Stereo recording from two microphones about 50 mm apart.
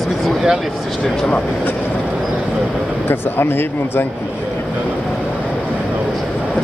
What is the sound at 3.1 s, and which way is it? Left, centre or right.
Speech, left.